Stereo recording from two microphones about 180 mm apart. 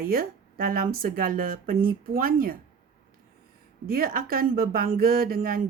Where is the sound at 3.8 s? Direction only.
55° right (ahead or behind).